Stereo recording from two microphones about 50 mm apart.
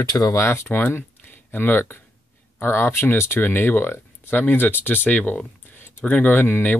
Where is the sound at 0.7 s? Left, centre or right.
Left.